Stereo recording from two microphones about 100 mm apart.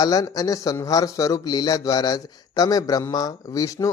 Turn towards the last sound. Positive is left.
turn(degrees=35)  # may be behind; listen again after turning